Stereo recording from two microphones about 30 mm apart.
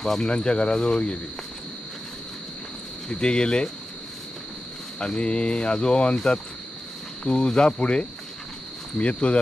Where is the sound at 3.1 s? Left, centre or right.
Left.